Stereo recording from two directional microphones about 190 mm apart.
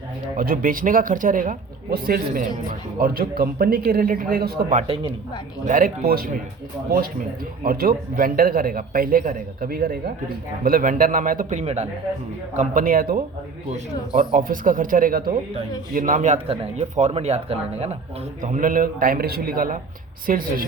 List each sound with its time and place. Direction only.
0.3 s a man's voice: 50° right (ahead or behind)
4.8 s speech: 30° right (ahead or behind)
5.6 s a man's voice: 45° right (ahead or behind)
7.6 s a man's voice: 50° right (ahead or behind)
12.5 s a man's voice: 45° right (ahead or behind)